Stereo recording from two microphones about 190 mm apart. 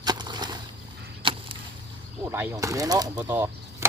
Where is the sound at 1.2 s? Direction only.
30° right (ahead or behind).